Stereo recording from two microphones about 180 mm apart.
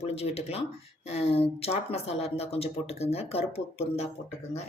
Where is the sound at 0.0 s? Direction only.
35° left (ahead or behind).